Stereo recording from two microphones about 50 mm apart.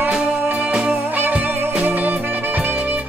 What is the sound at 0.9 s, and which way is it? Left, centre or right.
Music, right.